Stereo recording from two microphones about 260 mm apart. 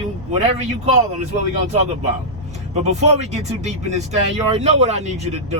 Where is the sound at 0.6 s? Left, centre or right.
Right.